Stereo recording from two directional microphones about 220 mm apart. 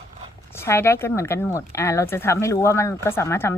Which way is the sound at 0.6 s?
10° left (ahead or behind).